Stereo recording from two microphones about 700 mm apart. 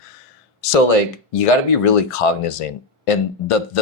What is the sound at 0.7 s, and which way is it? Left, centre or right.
Speech, left.